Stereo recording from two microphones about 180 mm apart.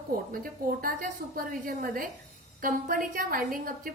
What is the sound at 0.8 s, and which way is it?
A woman's voice, 50° right (ahead or behind).